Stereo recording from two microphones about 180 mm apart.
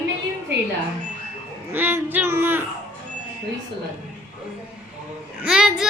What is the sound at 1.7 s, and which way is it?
Speech, 10° right (ahead or behind).